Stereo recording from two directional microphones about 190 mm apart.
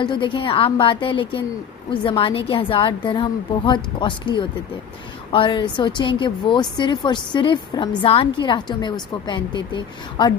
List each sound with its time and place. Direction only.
0.0 s a woman's voice: 25° left (ahead or behind)